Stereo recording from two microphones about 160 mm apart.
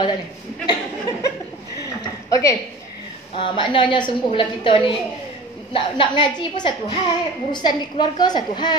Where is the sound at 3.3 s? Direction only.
30° left (ahead or behind).